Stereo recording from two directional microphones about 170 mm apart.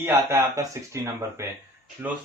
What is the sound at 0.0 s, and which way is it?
Speech, 15° right (ahead or behind).